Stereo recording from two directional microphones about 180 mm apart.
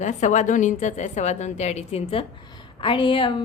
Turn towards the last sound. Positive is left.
turn(degrees=30)  # may be behind; listen again after turning